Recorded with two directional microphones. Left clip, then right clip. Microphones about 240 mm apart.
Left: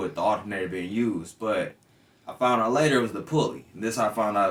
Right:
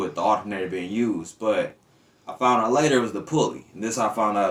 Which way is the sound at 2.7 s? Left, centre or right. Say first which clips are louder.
Right 2 dB; centre.